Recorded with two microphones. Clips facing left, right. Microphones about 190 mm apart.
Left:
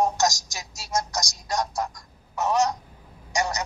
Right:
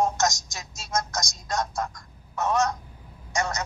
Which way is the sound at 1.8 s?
15° left (ahead or behind).